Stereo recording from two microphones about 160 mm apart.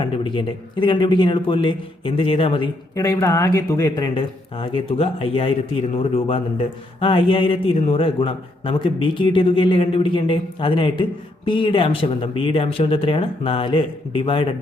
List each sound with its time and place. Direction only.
0.0 s a man's voice: 30° left (ahead or behind)
2.9 s a man's voice: 20° left (ahead or behind); by 14.5 s 35° left (ahead or behind)